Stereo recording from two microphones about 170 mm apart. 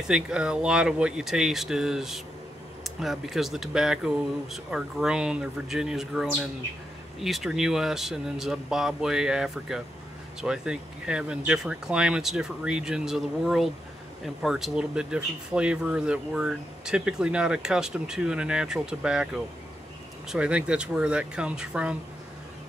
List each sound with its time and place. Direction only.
0.1 s speech: 5° right (ahead or behind)